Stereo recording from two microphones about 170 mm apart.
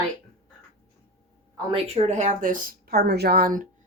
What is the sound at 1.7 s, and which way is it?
A woman's voice, 35° right (ahead or behind).